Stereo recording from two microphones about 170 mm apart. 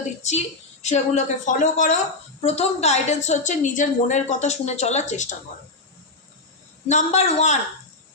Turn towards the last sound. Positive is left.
turn(degrees=40)  # may be behind; listen again after turning